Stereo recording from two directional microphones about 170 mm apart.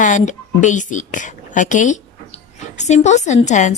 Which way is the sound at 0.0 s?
45° left (ahead or behind).